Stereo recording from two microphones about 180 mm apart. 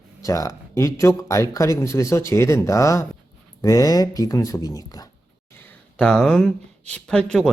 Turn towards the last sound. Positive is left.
turn(degrees=5)  # may be behind; listen again after turning